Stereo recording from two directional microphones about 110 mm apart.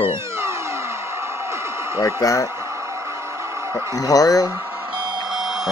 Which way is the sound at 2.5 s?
25° right (ahead or behind).